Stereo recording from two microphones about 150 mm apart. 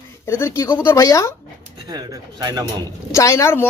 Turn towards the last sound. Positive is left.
turn(degrees=15)  # may be behind; listen again after turning